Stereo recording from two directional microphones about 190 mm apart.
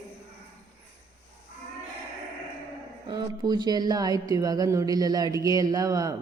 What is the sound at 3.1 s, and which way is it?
Speech, 20° right (ahead or behind).